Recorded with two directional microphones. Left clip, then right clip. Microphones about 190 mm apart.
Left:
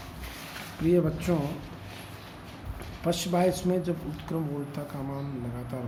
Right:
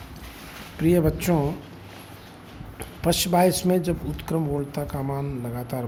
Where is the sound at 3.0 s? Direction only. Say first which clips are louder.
Right 6 dB; 55° right (ahead or behind).